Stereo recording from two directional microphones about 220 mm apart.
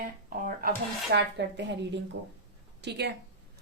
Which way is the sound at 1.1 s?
50° right (ahead or behind).